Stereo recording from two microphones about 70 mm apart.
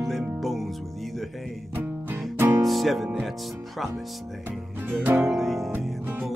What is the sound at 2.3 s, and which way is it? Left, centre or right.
Music, right.